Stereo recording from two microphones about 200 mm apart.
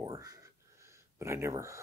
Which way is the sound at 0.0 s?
20° right (ahead or behind).